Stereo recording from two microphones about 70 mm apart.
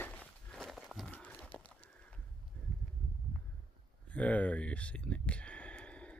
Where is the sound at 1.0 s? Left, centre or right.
Left.